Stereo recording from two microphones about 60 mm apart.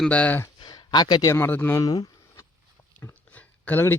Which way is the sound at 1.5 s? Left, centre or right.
Left.